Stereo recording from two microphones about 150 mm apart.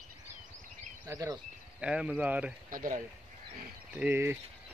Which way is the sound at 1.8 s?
5° right (ahead or behind).